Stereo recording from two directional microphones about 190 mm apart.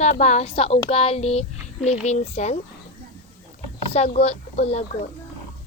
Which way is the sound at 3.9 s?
35° left (ahead or behind).